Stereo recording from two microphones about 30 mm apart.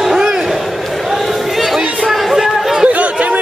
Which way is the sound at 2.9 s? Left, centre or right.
Right.